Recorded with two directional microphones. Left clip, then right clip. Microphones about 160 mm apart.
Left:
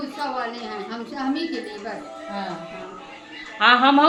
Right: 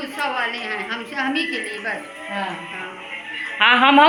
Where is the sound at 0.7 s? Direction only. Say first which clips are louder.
Right 5 dB; 25° left (ahead or behind).